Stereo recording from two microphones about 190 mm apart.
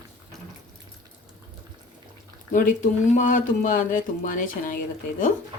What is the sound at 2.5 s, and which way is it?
Speech, 45° left (ahead or behind).